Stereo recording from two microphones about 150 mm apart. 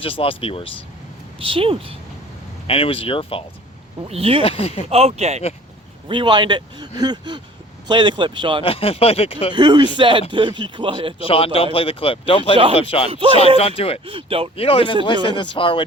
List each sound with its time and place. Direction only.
0.0 s speech: 40° left (ahead or behind)
1.4 s speech: 35° right (ahead or behind)
2.6 s speech: 40° left (ahead or behind)
4.1 s speech: 40° right (ahead or behind)
4.4 s speech: 40° left (ahead or behind)
4.9 s speech: 40° right (ahead or behind)
6.1 s speech: 35° right (ahead or behind)
8.6 s speech: 40° left (ahead or behind)
9.6 s speech: 30° right (ahead or behind)
11.3 s speech: 40° left (ahead or behind)
13.1 s speech: 40° right (ahead or behind)
13.6 s speech: 40° left (ahead or behind)
14.0 s speech: 35° right (ahead or behind)
14.5 s speech: 40° left (ahead or behind)